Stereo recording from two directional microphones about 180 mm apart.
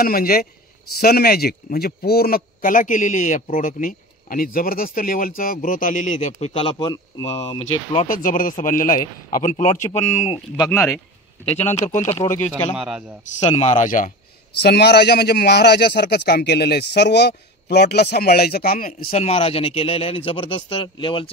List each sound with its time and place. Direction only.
0.0 s a man's voice: 55° left (ahead or behind); by 7.2 s 25° left (ahead or behind)
7.2 s speech: 35° left (ahead or behind)
8.1 s a man's voice: 50° left (ahead or behind)
11.5 s speech: 40° left (ahead or behind)
12.7 s a man's voice: 5° right (ahead or behind)
13.4 s a man's voice: 40° left (ahead or behind)
14.6 s speech: 65° left (ahead or behind); by 19.2 s 50° left (ahead or behind)
19.2 s speech: 30° left (ahead or behind)